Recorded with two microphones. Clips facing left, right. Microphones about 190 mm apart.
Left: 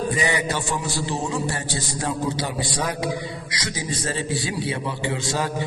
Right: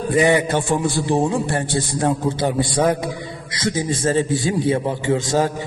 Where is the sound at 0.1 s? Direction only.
55° right (ahead or behind).